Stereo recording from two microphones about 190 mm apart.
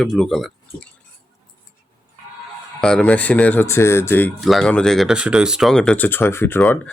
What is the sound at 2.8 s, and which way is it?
Speech, 5° left (ahead or behind).